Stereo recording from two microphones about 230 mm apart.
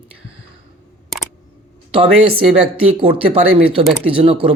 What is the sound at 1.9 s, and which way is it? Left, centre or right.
Speech, right.